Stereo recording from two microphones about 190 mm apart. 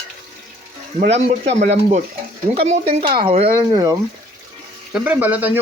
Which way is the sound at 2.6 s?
30° right (ahead or behind).